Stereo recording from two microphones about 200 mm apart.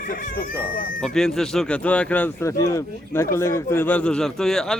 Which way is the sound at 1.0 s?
Centre (ahead or behind).